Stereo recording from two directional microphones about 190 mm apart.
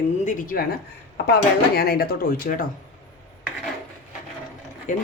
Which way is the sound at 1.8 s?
55° left (ahead or behind).